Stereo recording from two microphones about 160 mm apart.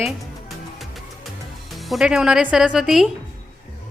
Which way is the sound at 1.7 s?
Centre (ahead or behind).